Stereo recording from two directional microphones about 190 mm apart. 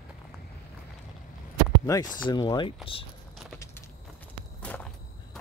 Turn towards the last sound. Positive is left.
turn(degrees=5)  # may be behind; listen again after turning